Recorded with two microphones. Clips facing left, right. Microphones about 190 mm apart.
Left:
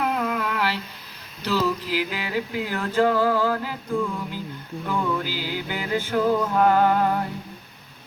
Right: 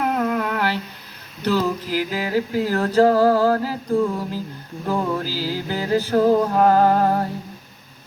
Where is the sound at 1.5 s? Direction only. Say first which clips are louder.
Right 3 dB; 45° right (ahead or behind).